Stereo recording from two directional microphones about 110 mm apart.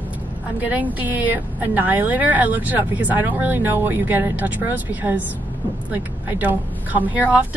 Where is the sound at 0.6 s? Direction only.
15° right (ahead or behind).